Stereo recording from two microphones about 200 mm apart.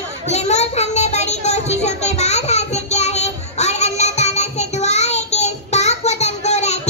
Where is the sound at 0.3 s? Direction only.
35° left (ahead or behind).